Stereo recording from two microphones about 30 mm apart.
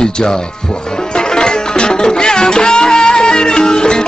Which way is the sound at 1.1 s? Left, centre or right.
Left.